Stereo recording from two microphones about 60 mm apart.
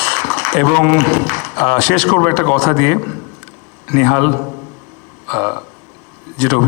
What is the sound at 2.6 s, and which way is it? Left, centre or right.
Speech, left.